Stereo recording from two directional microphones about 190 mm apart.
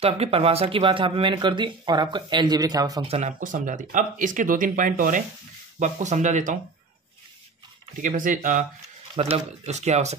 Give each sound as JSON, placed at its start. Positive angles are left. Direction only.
{"t": 0.0, "sound": "speech", "side_deg": -30}
{"t": 3.1, "sound": "speech", "side_deg": -40}
{"t": 8.0, "sound": "speech", "side_deg": -45}
{"t": 9.1, "sound": "speech", "side_deg": -30}